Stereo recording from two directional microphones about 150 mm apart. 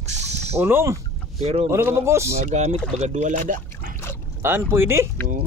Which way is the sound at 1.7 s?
20° right (ahead or behind).